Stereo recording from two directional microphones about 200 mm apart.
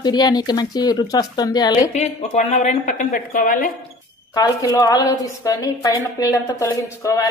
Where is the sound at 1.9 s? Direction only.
35° left (ahead or behind).